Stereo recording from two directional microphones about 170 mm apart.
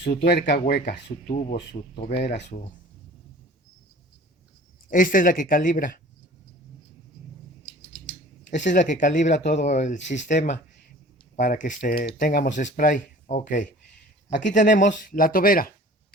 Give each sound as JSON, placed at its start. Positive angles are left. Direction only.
{"t": 0.0, "sound": "speech", "side_deg": 80}
{"t": 0.7, "sound": "speech", "side_deg": 70}
{"t": 4.9, "sound": "speech", "side_deg": 55}
{"t": 7.6, "sound": "scissors", "side_deg": 5}
{"t": 8.5, "sound": "speech", "side_deg": 45}
{"t": 12.5, "sound": "speech", "side_deg": 50}